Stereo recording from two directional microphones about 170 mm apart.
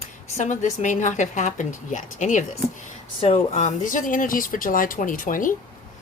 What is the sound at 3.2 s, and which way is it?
A woman's voice, 35° left (ahead or behind).